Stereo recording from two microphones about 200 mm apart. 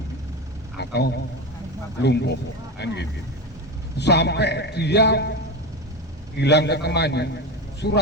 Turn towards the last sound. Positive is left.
turn(degrees=55)  # may be behind; listen again after turning